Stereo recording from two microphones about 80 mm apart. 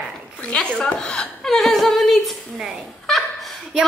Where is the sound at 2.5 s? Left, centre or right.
Centre.